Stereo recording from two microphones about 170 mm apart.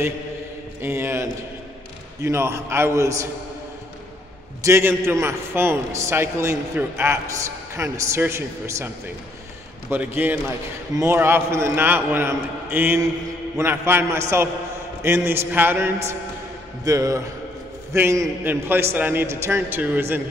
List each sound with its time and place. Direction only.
0.8 s a man's voice: 15° right (ahead or behind)
4.6 s a man's voice: 15° right (ahead or behind)